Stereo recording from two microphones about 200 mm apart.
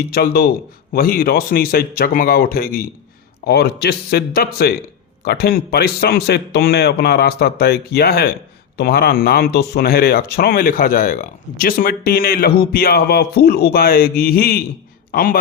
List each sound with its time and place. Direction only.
0.1 s a man's voice: 50° left (ahead or behind)